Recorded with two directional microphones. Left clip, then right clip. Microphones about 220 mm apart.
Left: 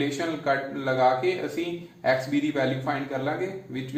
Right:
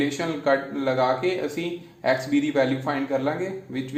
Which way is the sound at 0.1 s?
40° right (ahead or behind).